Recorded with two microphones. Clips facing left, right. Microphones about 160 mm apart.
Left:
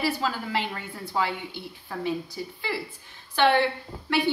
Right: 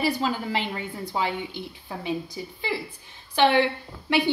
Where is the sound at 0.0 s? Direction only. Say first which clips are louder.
Right 2 dB; 20° right (ahead or behind).